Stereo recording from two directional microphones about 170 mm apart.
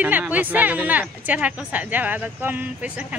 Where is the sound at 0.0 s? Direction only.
10° right (ahead or behind).